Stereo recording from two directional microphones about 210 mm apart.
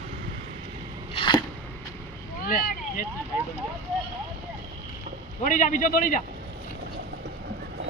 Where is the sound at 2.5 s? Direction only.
45° left (ahead or behind).